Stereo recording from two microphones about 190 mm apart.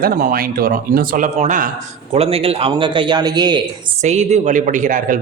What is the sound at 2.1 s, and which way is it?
A man's voice, 30° right (ahead or behind).